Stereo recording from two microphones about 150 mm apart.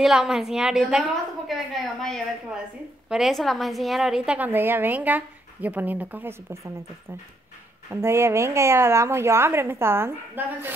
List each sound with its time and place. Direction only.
0.0 s a woman's voice: 5° right (ahead or behind)
7.9 s a woman's voice: 15° right (ahead or behind)